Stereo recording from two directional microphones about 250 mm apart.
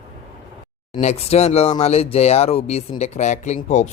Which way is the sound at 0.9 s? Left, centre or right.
Left.